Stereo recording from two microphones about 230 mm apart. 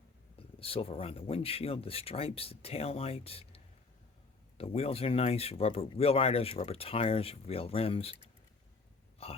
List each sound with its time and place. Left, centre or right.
0.3 s speech: left
9.2 s speech: left